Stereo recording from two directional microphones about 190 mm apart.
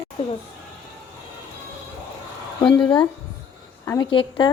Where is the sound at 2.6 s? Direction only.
20° left (ahead or behind).